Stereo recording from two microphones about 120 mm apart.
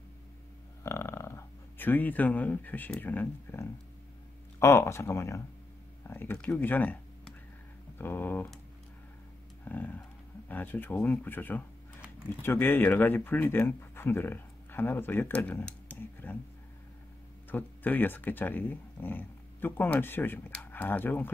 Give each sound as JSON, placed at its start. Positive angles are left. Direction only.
{"t": 0.8, "sound": "speech", "side_deg": 25}
{"t": 9.7, "sound": "speech", "side_deg": 15}
{"t": 17.5, "sound": "speech", "side_deg": 15}